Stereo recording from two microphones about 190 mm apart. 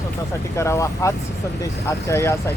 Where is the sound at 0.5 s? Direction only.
15° left (ahead or behind).